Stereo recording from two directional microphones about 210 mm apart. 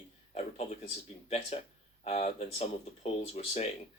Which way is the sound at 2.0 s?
30° left (ahead or behind).